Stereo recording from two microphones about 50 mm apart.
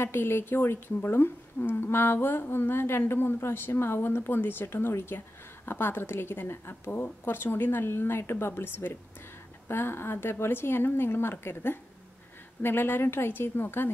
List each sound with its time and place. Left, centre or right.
0.0 s a woman's voice: left